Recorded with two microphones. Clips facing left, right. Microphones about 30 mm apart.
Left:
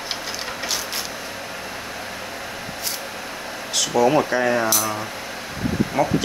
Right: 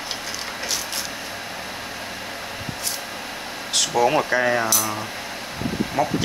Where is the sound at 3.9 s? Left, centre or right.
Right.